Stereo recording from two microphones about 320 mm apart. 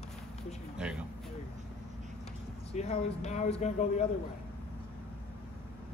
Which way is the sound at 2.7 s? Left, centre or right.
Centre.